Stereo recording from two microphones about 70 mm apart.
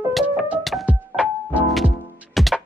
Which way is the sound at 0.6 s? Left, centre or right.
Centre.